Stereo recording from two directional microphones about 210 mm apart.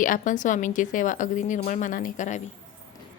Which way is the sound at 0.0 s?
40° left (ahead or behind).